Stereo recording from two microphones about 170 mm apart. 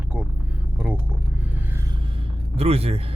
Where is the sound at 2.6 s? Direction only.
35° right (ahead or behind).